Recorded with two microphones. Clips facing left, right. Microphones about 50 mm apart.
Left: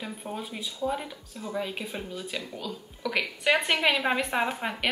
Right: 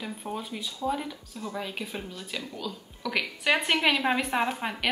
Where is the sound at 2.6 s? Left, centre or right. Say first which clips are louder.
Left 1 dB; centre.